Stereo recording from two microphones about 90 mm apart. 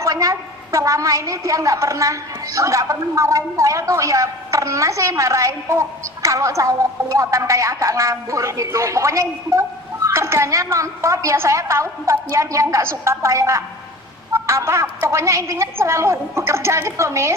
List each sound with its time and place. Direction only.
0.0 s a woman's voice: 40° right (ahead or behind)